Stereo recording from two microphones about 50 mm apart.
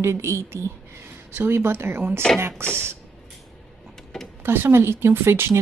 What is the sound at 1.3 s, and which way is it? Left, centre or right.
Speech, right.